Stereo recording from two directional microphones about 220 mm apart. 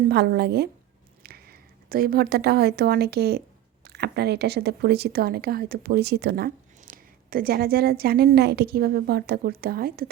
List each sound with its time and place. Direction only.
0.1 s a woman's voice: 50° right (ahead or behind)